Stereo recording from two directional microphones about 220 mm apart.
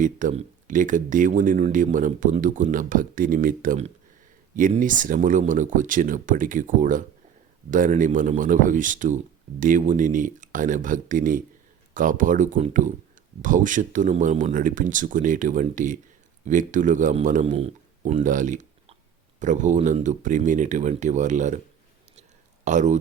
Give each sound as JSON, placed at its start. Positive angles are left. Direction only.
{"t": 0.0, "sound": "a man's voice", "side_deg": -35}
{"t": 22.6, "sound": "speech", "side_deg": -35}